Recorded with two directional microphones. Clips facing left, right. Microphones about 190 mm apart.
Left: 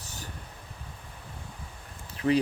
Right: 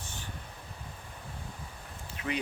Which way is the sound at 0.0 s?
40° left (ahead or behind).